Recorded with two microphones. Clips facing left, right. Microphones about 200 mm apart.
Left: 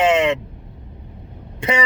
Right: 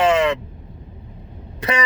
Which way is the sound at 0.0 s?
25° left (ahead or behind).